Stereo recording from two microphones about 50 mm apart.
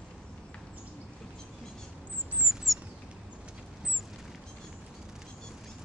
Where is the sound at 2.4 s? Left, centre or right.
Centre.